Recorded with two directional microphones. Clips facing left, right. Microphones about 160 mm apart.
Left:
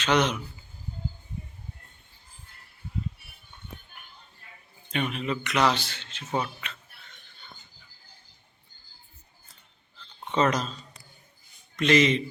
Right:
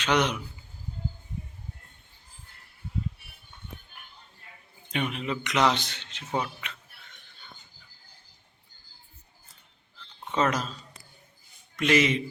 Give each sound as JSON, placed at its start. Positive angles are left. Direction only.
{"t": 0.0, "sound": "a man's voice", "side_deg": -10}
{"t": 4.9, "sound": "a man's voice", "side_deg": -15}
{"t": 10.3, "sound": "speech", "side_deg": -5}
{"t": 11.8, "sound": "a man's voice", "side_deg": -10}